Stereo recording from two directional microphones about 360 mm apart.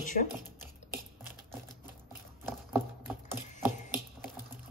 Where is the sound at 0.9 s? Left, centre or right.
Centre.